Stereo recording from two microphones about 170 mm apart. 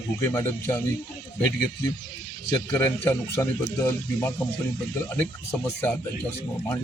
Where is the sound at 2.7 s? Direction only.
15° left (ahead or behind).